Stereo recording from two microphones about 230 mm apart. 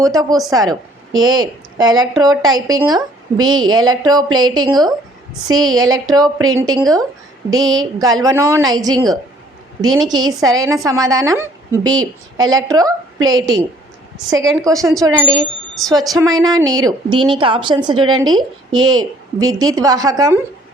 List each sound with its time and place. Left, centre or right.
0.0 s a woman's voice: centre
14.3 s a woman's voice: centre